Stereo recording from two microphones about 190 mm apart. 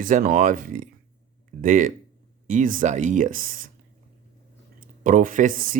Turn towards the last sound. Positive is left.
turn(degrees=-45)  # may be behind; listen again after turning